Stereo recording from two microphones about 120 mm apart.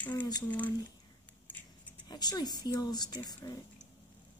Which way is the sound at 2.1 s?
35° left (ahead or behind).